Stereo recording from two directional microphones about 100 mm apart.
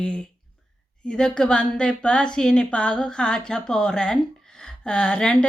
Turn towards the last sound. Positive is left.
turn(degrees=10)  # may be behind; listen again after turning